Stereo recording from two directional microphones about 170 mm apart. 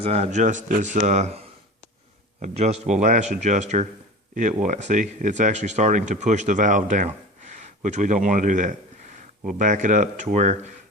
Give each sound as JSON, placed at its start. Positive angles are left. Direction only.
{"t": 0.0, "sound": "speech", "side_deg": -40}
{"t": 2.4, "sound": "speech", "side_deg": -40}